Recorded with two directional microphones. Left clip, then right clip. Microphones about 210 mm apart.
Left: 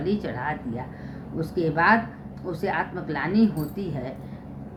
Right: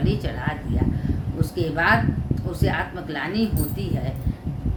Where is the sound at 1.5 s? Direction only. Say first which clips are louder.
Even; 5° right (ahead or behind).